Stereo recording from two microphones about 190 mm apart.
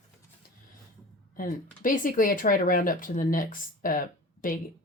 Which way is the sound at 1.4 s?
45° left (ahead or behind).